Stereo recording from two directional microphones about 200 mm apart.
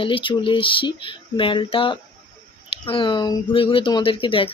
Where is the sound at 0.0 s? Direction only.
25° left (ahead or behind).